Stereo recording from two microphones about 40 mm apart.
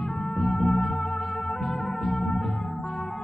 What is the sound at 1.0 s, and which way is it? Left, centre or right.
Organ, centre.